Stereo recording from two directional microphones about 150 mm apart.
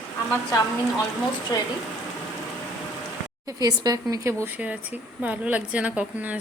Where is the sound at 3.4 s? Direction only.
25° right (ahead or behind).